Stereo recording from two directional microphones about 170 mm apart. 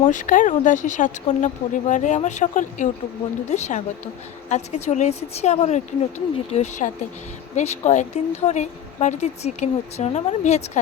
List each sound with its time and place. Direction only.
0.0 s a woman's voice: 50° left (ahead or behind)